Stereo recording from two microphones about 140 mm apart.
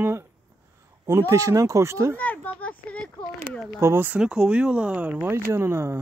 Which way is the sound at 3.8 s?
15° right (ahead or behind).